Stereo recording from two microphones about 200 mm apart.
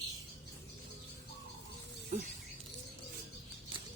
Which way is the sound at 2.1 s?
40° right (ahead or behind).